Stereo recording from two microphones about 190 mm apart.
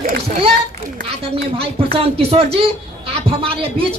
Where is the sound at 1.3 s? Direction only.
30° right (ahead or behind).